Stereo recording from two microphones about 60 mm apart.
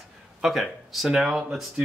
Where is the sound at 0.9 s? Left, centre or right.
Centre.